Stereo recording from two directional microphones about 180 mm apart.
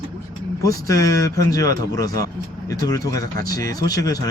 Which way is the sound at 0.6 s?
20° left (ahead or behind).